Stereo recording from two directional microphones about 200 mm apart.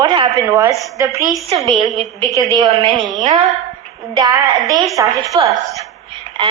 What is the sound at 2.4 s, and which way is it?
A woman's voice, 20° right (ahead or behind).